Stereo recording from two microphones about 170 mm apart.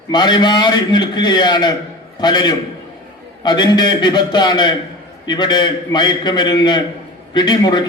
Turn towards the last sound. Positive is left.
turn(degrees=25)  # may be behind; listen again after turning